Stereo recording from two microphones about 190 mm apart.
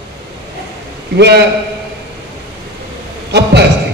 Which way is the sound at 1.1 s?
60° right (ahead or behind).